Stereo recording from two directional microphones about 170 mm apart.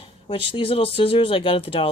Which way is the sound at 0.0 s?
30° left (ahead or behind).